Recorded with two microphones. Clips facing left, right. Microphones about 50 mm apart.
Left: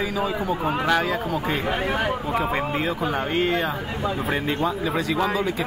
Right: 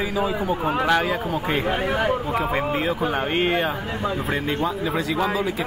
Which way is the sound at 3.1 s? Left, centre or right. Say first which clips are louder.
Even; right.